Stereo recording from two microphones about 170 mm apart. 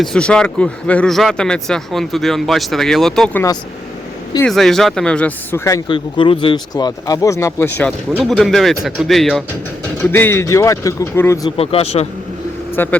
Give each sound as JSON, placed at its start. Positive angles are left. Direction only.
{"t": 0.0, "sound": "speech", "side_deg": 5}
{"t": 4.4, "sound": "speech", "side_deg": 0}
{"t": 6.1, "sound": "speech", "side_deg": 30}
{"t": 10.0, "sound": "speech", "side_deg": 10}
{"t": 11.5, "sound": "speech", "side_deg": 35}
{"t": 12.7, "sound": "speech", "side_deg": 10}